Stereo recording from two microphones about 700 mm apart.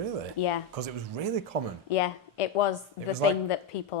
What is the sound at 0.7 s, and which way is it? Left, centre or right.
Speech, right.